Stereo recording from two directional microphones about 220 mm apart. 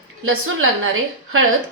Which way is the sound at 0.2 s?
70° right (ahead or behind).